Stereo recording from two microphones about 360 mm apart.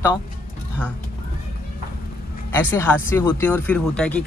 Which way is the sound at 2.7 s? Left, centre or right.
Centre.